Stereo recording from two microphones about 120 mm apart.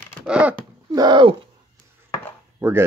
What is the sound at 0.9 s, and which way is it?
Speech, 35° right (ahead or behind).